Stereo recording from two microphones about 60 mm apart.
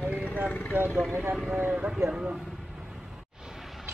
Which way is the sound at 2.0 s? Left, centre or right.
Centre.